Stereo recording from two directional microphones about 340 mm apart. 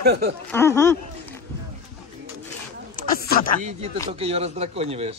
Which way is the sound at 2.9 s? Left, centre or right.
Left.